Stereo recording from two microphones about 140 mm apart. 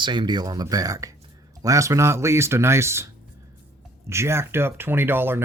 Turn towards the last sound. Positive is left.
turn(degrees=-15)  # may be behind; listen again after turning